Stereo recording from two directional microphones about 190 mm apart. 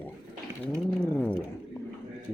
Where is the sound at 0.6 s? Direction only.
5° left (ahead or behind).